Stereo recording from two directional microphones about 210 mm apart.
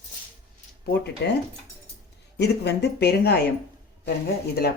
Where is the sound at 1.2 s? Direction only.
50° left (ahead or behind).